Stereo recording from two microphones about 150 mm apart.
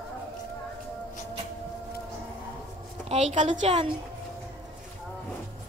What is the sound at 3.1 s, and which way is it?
Speech, 50° right (ahead or behind).